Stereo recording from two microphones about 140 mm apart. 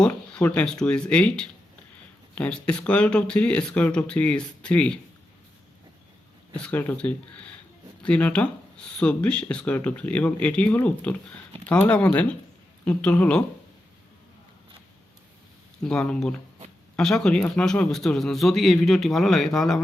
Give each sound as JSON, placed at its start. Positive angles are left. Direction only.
{"t": 0.0, "sound": "speech", "side_deg": 10}
{"t": 6.5, "sound": "speech", "side_deg": 10}
{"t": 15.8, "sound": "a man's voice", "side_deg": 5}